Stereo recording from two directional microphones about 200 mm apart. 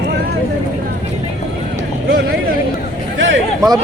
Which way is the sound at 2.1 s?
45° right (ahead or behind).